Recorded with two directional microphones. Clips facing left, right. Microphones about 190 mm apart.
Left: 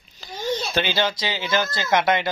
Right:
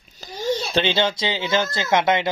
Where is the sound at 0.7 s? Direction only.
25° right (ahead or behind).